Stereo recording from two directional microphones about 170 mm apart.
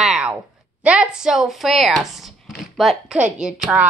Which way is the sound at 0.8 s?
5° right (ahead or behind).